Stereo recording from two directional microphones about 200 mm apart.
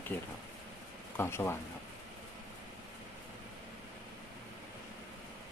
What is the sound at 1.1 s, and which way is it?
Speech, 10° left (ahead or behind).